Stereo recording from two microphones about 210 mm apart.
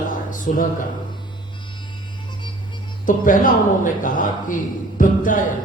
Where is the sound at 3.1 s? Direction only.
40° left (ahead or behind).